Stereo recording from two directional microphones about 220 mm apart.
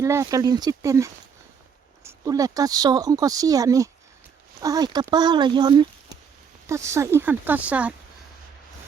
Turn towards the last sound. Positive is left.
turn(degrees=-5)  # may be behind; listen again after turning